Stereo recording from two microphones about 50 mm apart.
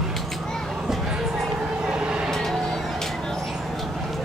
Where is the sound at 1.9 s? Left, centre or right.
Right.